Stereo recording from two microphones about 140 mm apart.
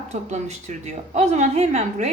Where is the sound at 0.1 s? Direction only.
55° right (ahead or behind).